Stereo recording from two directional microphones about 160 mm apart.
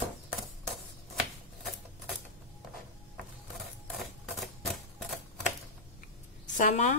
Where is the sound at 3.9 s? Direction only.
Centre (ahead or behind).